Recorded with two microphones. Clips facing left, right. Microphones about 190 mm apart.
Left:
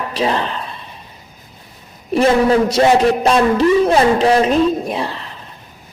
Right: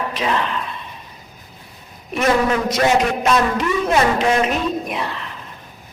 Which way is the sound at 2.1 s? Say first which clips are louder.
Left 5 dB; 30° left (ahead or behind).